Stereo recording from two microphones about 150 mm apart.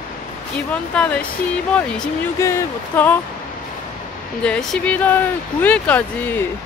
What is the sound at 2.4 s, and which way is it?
Speech, 20° left (ahead or behind).